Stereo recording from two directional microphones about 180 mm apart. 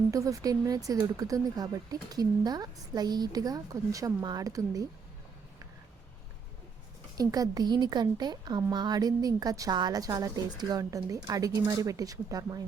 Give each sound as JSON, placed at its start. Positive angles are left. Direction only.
{"t": 0.1, "sound": "speech", "side_deg": -20}
{"t": 7.2, "sound": "speech", "side_deg": -20}